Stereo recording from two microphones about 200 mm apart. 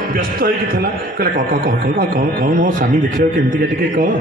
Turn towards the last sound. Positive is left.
turn(degrees=-45)  # may be behind; listen again after turning